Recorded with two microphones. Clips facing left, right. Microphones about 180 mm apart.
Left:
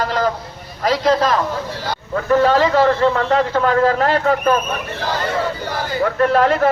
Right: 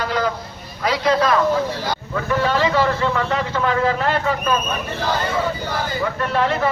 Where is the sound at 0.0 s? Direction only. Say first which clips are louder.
Left 3 dB; 40° left (ahead or behind).